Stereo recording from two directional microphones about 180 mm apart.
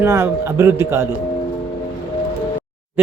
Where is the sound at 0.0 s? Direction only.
15° right (ahead or behind).